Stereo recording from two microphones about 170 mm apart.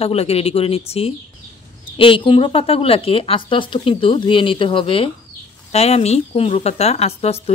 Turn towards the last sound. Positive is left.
turn(degrees=40)  # may be behind; listen again after turning